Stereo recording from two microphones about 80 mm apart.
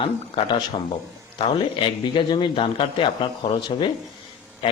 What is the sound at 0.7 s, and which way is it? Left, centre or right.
Speech, left.